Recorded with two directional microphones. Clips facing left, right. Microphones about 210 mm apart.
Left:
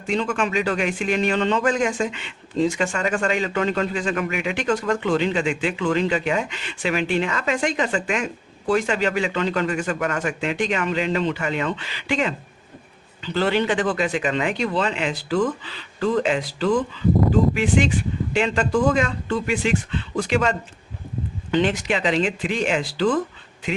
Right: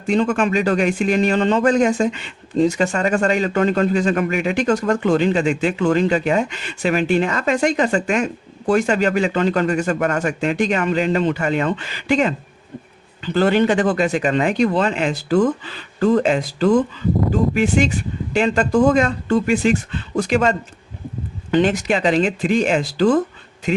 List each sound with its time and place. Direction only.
0.1 s speech: 45° right (ahead or behind)